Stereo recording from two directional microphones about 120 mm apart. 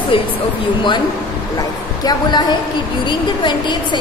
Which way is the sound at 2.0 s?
35° left (ahead or behind).